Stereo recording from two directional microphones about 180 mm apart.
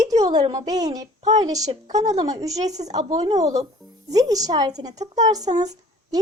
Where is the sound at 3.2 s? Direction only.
20° right (ahead or behind).